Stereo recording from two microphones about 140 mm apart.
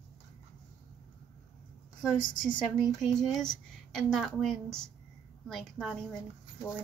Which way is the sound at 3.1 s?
5° left (ahead or behind).